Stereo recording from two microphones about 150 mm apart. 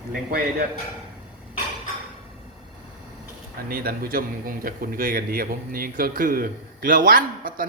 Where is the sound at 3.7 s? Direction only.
80° right.